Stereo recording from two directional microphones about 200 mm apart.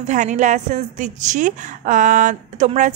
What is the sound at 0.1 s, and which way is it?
A woman's voice, 35° right (ahead or behind).